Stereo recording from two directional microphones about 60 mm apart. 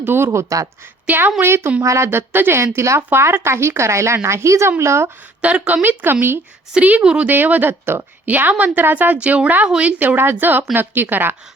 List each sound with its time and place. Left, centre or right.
0.0 s a woman's voice: right
0.3 s speech: right
1.0 s a woman's voice: right
1.8 s speech: right
2.0 s a woman's voice: right
2.7 s a woman's voice: right
3.1 s a woman's voice: right
5.4 s speech: right
7.0 s speech: centre
7.3 s a woman's voice: right
8.3 s a woman's voice: right
9.6 s speech: centre
10.0 s a woman's voice: right